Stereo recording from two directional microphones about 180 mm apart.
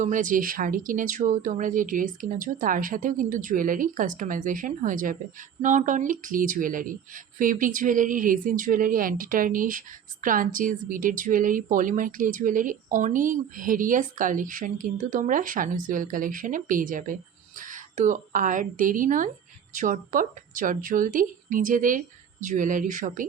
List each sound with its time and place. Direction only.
0.0 s a woman's voice: 45° right (ahead or behind)